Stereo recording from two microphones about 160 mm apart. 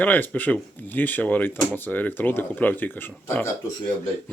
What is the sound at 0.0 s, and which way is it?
Speech, 10° left (ahead or behind).